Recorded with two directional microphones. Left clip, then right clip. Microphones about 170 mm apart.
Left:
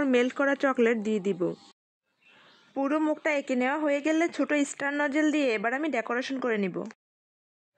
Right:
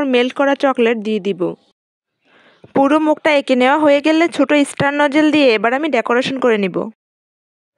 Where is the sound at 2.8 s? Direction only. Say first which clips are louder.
Right 13 dB; 50° right (ahead or behind).